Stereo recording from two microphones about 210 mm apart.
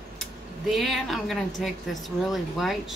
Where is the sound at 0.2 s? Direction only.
Centre (ahead or behind).